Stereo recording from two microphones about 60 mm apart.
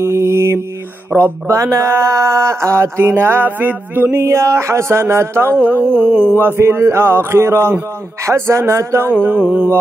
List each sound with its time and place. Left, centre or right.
0.0 s mantra: right
1.1 s mantra: right
1.5 s speech: right
4.1 s speech: right
5.9 s mantra: centre
6.3 s a sound: right
6.6 s speech: right
9.1 s mantra: right